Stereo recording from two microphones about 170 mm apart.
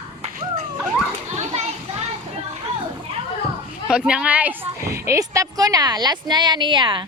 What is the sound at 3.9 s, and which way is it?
A woman's voice, 5° right (ahead or behind).